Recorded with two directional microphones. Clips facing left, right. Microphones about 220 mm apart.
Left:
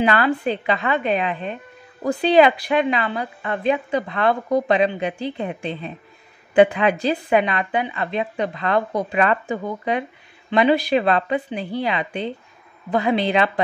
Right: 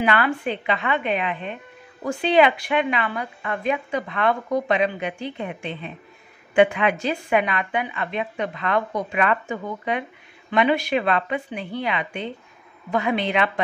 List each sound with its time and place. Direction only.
0.0 s a woman's voice: 35° left (ahead or behind)